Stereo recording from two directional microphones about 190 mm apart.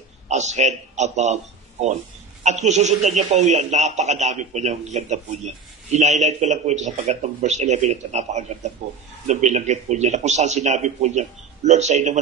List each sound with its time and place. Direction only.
0.3 s a man's voice: 40° right (ahead or behind)